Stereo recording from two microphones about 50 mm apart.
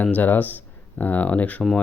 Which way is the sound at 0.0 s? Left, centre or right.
Left.